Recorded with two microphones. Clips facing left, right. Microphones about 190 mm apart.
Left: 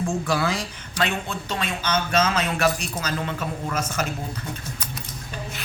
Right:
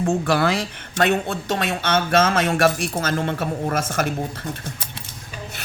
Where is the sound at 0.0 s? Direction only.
65° right (ahead or behind).